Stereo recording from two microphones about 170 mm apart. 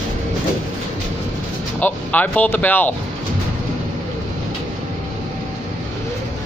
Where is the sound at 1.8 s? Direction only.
10° left (ahead or behind).